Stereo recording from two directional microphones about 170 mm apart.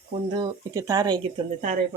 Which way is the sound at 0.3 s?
25° right (ahead or behind).